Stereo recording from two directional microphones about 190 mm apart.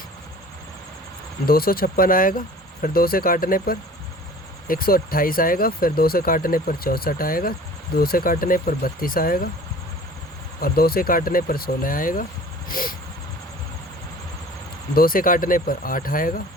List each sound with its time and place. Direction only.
1.5 s speech: 50° left (ahead or behind)
10.6 s speech: 50° left (ahead or behind)
12.6 s a sound: 45° left (ahead or behind)
14.9 s speech: 50° left (ahead or behind)